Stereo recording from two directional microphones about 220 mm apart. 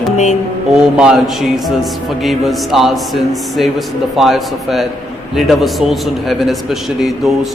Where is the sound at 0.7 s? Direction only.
5° right (ahead or behind).